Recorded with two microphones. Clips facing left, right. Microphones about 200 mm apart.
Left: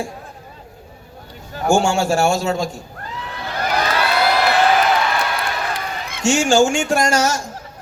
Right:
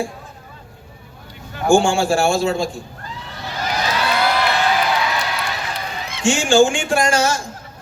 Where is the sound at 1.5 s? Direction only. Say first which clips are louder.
Right 2 dB; 40° left (ahead or behind).